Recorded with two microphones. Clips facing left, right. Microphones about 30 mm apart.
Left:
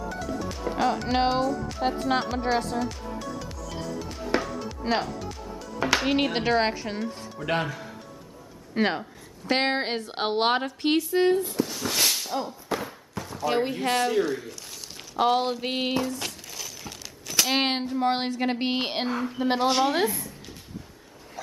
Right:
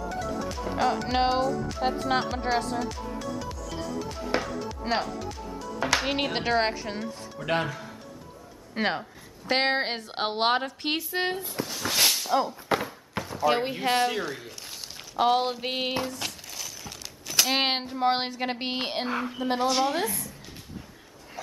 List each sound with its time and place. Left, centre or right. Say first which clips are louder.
0.1 s music: right 1 dB; centre
8.7 s speech: left 2 dB; centre
11.6 s a sound: right 1 dB; centre
12.3 s speech: right 5 dB; right
12.7 s a sound: right 3 dB; right
13.2 s speech: right 1 dB; centre
16.1 s a sound: left 2 dB; centre
19.0 s speech: left 1 dB; centre
19.4 s a woman's voice: left 3 dB; left